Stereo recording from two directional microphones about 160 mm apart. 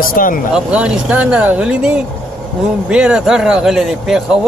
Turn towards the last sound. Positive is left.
turn(degrees=-5)  # may be behind; listen again after turning